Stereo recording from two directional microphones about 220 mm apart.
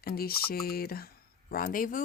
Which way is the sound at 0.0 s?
45° left (ahead or behind).